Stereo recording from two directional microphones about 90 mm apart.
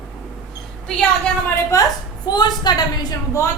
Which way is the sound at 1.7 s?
40° left (ahead or behind).